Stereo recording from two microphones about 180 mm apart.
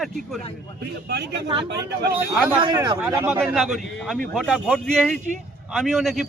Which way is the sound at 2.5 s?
25° right (ahead or behind).